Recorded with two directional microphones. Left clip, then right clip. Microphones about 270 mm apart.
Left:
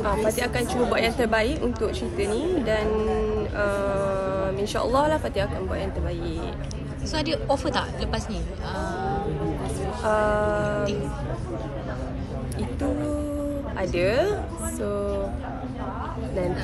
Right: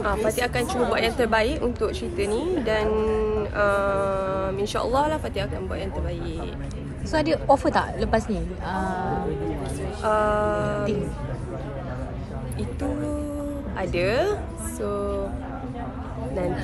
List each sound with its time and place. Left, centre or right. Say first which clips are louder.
0.3 s a woman's voice: right 1 dB; centre
7.1 s a woman's voice: right 5 dB; right
10.0 s a woman's voice: right 1 dB; centre
13.7 s a woman's voice: even; centre